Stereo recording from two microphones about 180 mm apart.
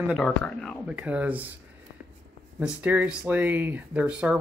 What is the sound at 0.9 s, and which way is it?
Speech, 5° right (ahead or behind).